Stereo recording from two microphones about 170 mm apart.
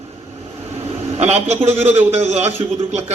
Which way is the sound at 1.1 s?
40° right (ahead or behind).